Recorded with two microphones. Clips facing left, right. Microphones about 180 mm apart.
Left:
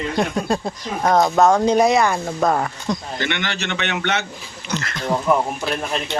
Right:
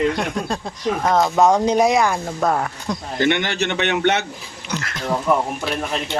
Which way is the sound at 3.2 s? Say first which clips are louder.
Right 6 dB; 50° right (ahead or behind).